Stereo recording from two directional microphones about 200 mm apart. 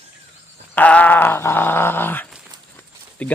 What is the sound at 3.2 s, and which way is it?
Speech, 5° left (ahead or behind).